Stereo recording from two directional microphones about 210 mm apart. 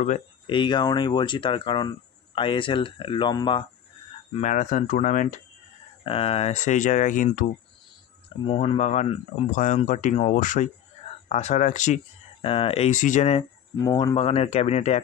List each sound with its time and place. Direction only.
0.5 s speech: 20° left (ahead or behind)
4.4 s speech: 35° left (ahead or behind)
6.0 s speech: 25° left (ahead or behind)
8.5 s speech: 30° left (ahead or behind)